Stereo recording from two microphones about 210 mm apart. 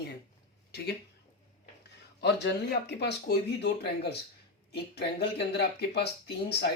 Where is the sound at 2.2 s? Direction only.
55° left (ahead or behind).